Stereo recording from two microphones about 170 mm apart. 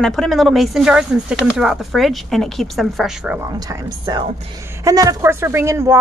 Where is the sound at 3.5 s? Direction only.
20° right (ahead or behind).